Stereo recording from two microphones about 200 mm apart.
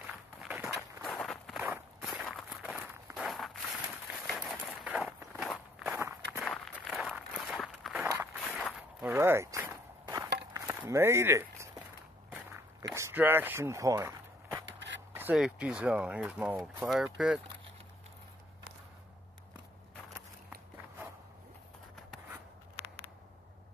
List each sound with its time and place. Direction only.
0.0 s walk: 5° right (ahead or behind)
0.7 s walk: centre (ahead or behind)
5.9 s walk: 15° right (ahead or behind)
6.4 s walk: centre (ahead or behind)
9.0 s a sound: 10° right (ahead or behind)
10.5 s walk: 15° right (ahead or behind)
12.9 s speech: 10° right (ahead or behind)
14.7 s a sound: 65° right (ahead or behind)
15.1 s speech: 5° right (ahead or behind)